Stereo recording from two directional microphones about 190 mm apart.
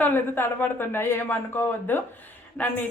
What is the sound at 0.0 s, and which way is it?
Speech, 10° left (ahead or behind).